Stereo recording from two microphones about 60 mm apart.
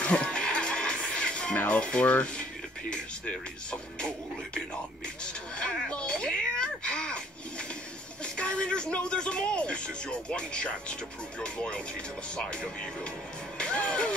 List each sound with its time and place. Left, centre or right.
0.0 s music: centre
1.7 s speech: centre
5.2 s speech: centre
13.6 s speech: centre